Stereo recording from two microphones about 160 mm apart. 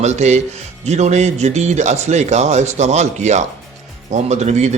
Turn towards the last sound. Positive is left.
turn(degrees=-45)  # may be behind; listen again after turning